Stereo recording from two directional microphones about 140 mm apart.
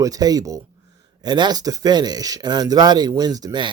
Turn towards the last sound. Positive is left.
turn(degrees=-30)  # may be behind; listen again after turning